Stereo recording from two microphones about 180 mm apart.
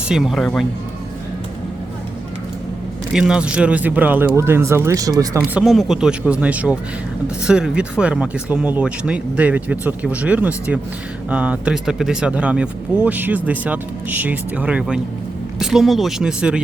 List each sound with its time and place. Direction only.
0.1 s speech: centre (ahead or behind)
3.1 s speech: 5° right (ahead or behind); by 5.4 s 20° right (ahead or behind)
5.4 s speech: centre (ahead or behind)